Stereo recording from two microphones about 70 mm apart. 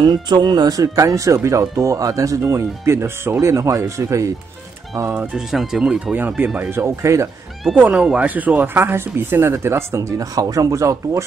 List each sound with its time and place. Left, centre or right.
0.0 s speech: right
2.5 s speech: right
5.1 s speech: centre
5.5 s speech: centre
6.1 s speech: right
6.7 s speech: right
8.0 s speech: centre
8.3 s speech: right
10.1 s speech: right